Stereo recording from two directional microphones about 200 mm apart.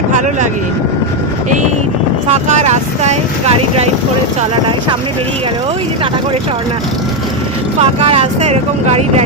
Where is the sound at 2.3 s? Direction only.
35° right (ahead or behind).